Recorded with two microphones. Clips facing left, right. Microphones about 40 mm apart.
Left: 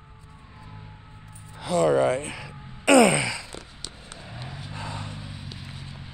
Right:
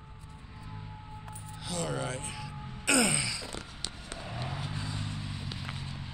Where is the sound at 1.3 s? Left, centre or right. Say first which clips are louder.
Left 13 dB; left.